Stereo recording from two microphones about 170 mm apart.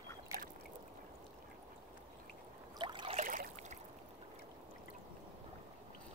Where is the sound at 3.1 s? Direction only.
50° right (ahead or behind).